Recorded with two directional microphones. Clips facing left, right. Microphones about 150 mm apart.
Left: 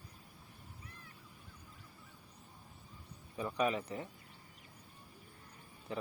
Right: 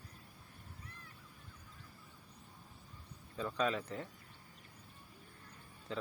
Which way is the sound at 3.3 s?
15° left (ahead or behind).